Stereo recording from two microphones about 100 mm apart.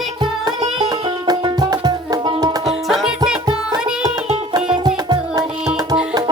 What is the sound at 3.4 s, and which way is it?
Music, 45° right (ahead or behind).